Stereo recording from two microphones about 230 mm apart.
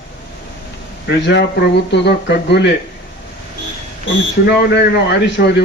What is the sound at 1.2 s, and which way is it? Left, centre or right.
A man's voice, left.